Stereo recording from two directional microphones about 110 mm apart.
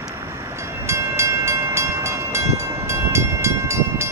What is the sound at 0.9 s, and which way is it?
Train, 25° right (ahead or behind).